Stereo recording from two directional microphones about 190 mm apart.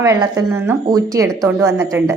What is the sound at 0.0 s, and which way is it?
Speech, 15° right (ahead or behind).